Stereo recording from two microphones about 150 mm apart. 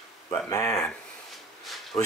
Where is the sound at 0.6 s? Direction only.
5° left (ahead or behind).